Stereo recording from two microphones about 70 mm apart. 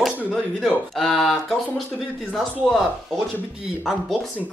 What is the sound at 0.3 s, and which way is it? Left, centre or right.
Speech, centre.